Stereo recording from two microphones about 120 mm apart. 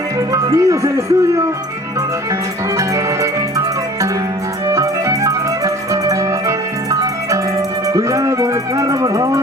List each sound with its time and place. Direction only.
0.3 s speech: 25° right (ahead or behind)
2.7 s music: 25° right (ahead or behind)
4.7 s music: 25° right (ahead or behind)